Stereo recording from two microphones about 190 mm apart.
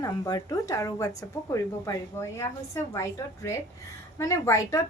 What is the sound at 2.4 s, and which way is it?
A woman's voice, 15° left (ahead or behind).